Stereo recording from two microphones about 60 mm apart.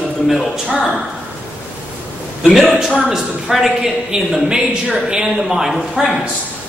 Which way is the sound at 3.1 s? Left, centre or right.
Centre.